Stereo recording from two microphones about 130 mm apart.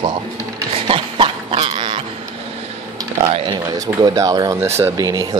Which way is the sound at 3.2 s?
50° right (ahead or behind).